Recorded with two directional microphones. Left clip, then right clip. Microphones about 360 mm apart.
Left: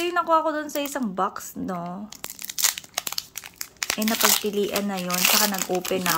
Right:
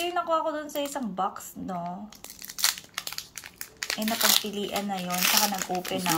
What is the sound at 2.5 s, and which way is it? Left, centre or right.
Crumpling, centre.